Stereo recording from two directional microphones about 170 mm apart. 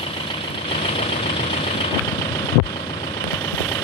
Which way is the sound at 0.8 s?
40° left (ahead or behind).